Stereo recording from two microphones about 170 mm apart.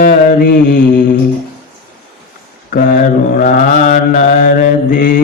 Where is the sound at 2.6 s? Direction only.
55° left (ahead or behind).